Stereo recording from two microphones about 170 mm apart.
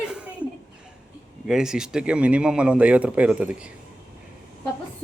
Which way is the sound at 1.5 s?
5° right (ahead or behind).